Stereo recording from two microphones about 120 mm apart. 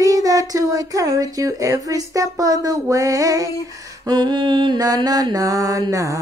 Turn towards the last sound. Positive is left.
turn(degrees=-25)  # may be behind; listen again after turning